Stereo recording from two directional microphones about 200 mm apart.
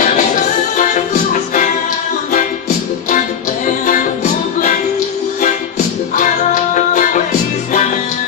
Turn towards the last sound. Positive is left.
turn(degrees=40)  # may be behind; listen again after turning